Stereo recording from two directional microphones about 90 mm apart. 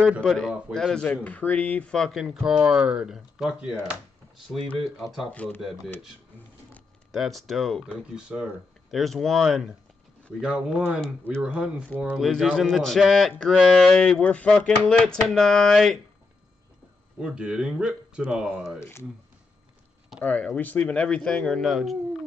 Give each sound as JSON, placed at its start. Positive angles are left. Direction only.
{"t": 0.2, "sound": "a man's voice", "side_deg": 0}
{"t": 1.0, "sound": "a sound", "side_deg": 15}
{"t": 2.0, "sound": "a man's voice", "side_deg": 5}
{"t": 2.3, "sound": "speech", "side_deg": -10}
{"t": 4.9, "sound": "a man's voice", "side_deg": 0}
{"t": 5.3, "sound": "a sound", "side_deg": 15}
{"t": 7.1, "sound": "a man's voice", "side_deg": 0}
{"t": 8.3, "sound": "speech", "side_deg": -10}
{"t": 8.9, "sound": "a man's voice", "side_deg": 0}
{"t": 12.2, "sound": "a man's voice", "side_deg": 5}
{"t": 13.9, "sound": "a sound", "side_deg": 10}
{"t": 17.2, "sound": "speech", "side_deg": -10}
{"t": 18.8, "sound": "speech", "side_deg": 30}
{"t": 20.2, "sound": "a sound", "side_deg": 15}